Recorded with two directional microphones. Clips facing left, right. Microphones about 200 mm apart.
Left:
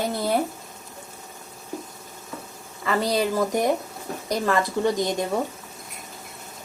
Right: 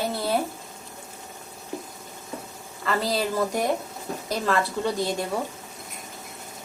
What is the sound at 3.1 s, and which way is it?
A woman's voice, 15° left (ahead or behind).